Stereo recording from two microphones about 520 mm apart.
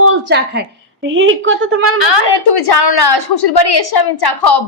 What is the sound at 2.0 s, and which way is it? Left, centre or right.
A woman's voice, left.